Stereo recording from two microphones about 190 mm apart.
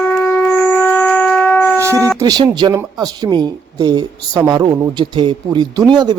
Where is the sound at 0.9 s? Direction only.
10° left (ahead or behind).